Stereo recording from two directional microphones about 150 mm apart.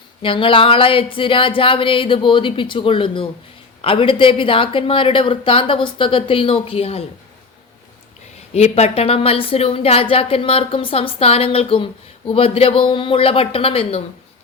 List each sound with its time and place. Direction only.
0.2 s a woman's voice: 35° left (ahead or behind)
8.5 s a woman's voice: 45° left (ahead or behind)